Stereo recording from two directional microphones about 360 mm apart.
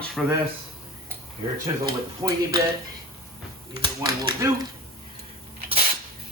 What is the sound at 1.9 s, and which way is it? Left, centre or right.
Speech, centre.